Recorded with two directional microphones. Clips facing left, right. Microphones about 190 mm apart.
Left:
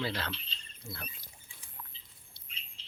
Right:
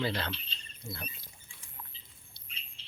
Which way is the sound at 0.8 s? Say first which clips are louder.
Right 2 dB; 20° right (ahead or behind).